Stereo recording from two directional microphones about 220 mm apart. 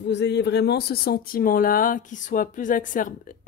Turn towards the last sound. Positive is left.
turn(degrees=35)  # may be behind; listen again after turning